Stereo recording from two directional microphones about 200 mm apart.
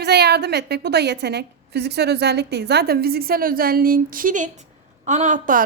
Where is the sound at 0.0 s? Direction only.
55° right (ahead or behind).